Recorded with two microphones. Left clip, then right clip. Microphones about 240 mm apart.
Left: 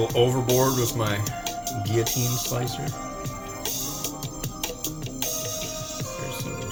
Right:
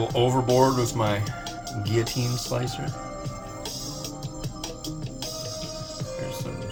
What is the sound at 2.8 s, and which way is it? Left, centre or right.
Music, left.